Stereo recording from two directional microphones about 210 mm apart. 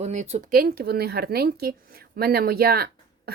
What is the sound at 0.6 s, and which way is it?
Speech, 50° right (ahead or behind).